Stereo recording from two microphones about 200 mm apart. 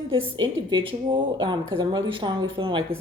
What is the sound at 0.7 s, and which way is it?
Speech, 25° right (ahead or behind).